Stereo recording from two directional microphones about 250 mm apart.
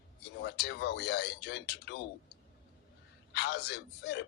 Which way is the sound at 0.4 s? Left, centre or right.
Left.